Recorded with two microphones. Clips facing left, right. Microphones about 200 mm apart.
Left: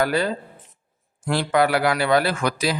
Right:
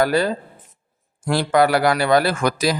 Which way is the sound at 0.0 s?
40° right (ahead or behind).